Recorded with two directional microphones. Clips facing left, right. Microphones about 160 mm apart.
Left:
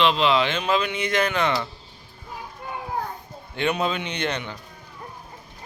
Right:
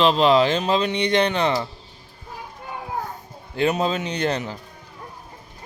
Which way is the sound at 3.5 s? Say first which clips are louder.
Right 3 dB; 35° right (ahead or behind).